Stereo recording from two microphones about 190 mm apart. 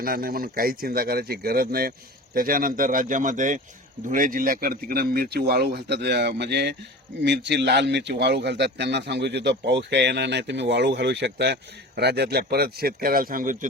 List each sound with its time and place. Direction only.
0.0 s a man's voice: 50° right (ahead or behind)